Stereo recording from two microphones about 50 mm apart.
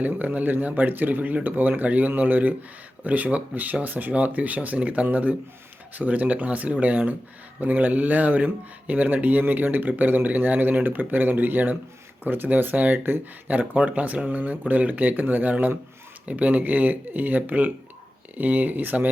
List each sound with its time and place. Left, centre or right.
0.0 s speech: right
9.4 s speech: right